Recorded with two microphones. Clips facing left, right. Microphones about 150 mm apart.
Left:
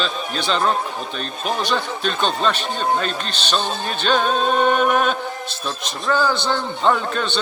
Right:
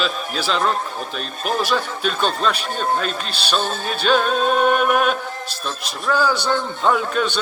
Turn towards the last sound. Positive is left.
turn(degrees=-5)  # may be behind; listen again after turning